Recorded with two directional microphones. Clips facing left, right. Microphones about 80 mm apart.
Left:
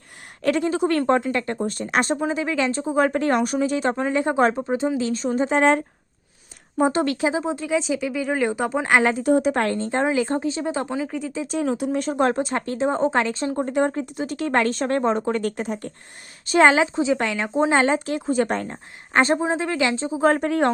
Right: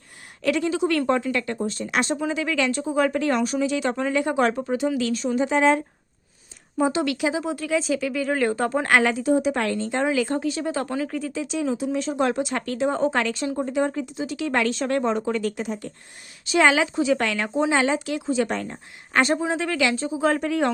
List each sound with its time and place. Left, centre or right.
0.4 s speech: left
1.6 s speech: left
5.2 s speech: left
9.2 s speech: left; by 11.3 s centre
11.4 s speech: left
17.6 s speech: left
20.1 s speech: left